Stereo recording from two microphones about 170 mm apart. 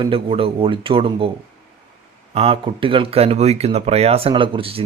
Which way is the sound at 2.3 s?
35° right (ahead or behind).